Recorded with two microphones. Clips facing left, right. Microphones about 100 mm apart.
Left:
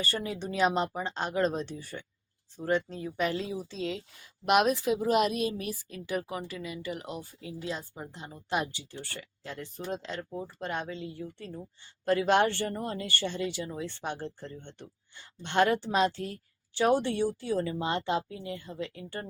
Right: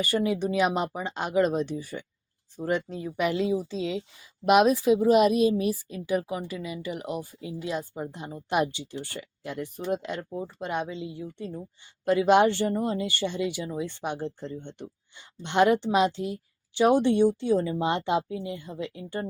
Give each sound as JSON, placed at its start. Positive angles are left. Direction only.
{"t": 0.0, "sound": "a woman's voice", "side_deg": -15}